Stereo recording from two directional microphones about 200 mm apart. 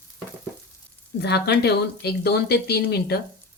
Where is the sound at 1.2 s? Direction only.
55° left (ahead or behind).